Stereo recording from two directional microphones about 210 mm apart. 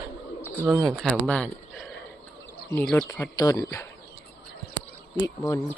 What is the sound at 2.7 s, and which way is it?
Speech, 5° left (ahead or behind).